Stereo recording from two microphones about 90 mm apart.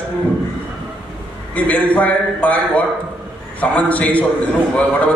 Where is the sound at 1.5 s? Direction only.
15° left (ahead or behind).